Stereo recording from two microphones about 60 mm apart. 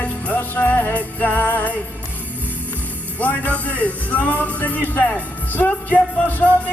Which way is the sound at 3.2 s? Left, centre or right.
Left.